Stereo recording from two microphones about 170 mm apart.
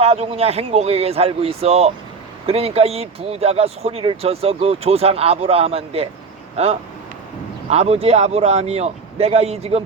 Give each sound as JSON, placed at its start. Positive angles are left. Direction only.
{"t": 0.0, "sound": "speech", "side_deg": -35}
{"t": 7.7, "sound": "speech", "side_deg": -40}